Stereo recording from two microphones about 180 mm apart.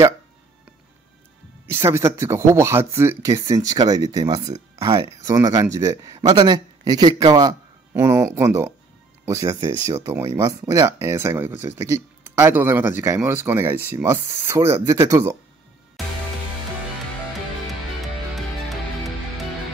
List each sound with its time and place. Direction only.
1.7 s speech: 15° right (ahead or behind)